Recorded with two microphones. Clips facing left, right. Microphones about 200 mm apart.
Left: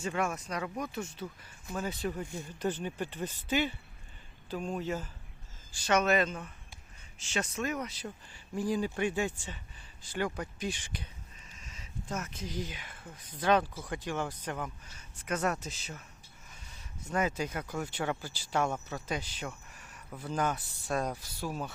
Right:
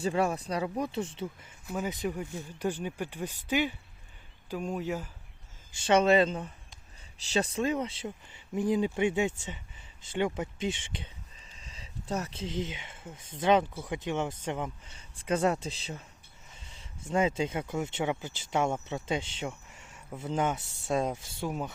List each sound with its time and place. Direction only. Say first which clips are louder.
0.0 s speech: right 5 dB; 35° right (ahead or behind)
1.6 s speech: right 2 dB; 15° right (ahead or behind)
5.7 s speech: right 5 dB; 30° right (ahead or behind)